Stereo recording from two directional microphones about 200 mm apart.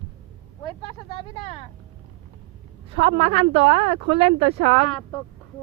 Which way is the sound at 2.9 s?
30° right (ahead or behind).